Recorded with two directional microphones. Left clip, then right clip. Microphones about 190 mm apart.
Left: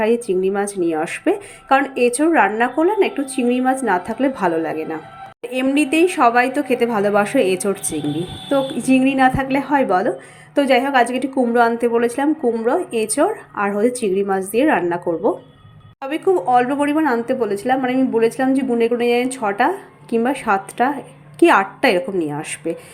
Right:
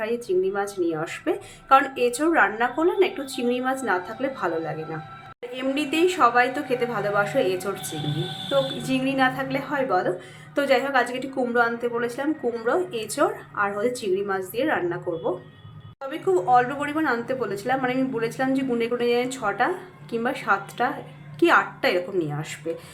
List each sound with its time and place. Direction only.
0.0 s a woman's voice: 30° left (ahead or behind)